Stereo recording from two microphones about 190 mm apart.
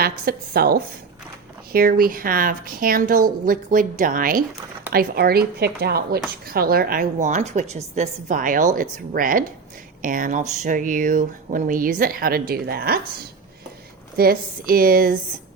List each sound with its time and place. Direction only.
0.0 s speech: 55° right (ahead or behind)
14.2 s speech: 50° right (ahead or behind)